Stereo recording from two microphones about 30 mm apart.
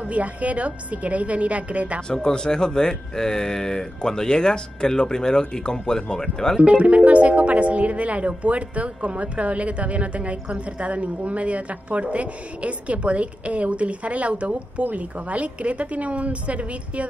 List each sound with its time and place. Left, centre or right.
0.1 s speech: right
2.1 s speech: left
6.6 s speech: right